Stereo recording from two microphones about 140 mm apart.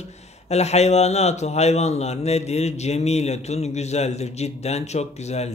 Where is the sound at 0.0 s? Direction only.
50° left (ahead or behind).